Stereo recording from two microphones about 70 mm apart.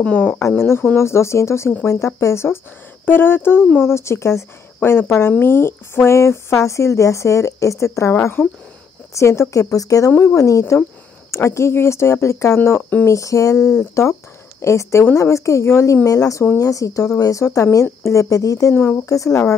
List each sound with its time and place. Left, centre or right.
0.0 s speech: left
0.6 s speech: left
9.1 s speech: left
13.0 s speech: left
14.6 s speech: left